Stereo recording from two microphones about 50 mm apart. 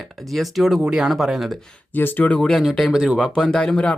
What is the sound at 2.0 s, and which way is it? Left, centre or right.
Speech, left.